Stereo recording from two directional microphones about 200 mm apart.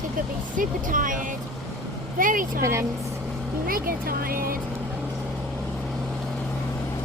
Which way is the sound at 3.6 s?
45° right (ahead or behind).